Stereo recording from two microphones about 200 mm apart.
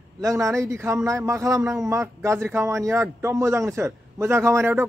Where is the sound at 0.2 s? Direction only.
15° right (ahead or behind).